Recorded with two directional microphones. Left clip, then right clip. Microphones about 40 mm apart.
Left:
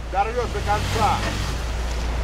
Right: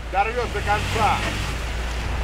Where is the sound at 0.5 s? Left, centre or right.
Right.